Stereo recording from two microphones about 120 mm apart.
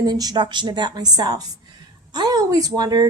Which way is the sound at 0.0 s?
30° right (ahead or behind).